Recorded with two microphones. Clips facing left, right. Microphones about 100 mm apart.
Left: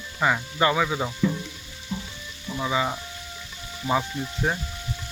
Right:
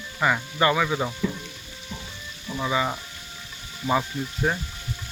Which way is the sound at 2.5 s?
5° left (ahead or behind).